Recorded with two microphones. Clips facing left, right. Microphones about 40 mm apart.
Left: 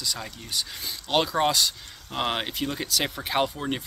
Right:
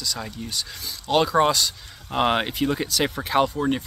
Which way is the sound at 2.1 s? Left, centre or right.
Centre.